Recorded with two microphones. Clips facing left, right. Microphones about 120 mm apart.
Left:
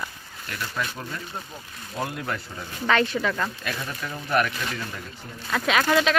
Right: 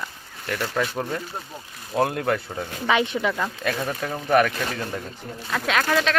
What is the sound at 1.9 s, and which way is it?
Speech, 75° right (ahead or behind).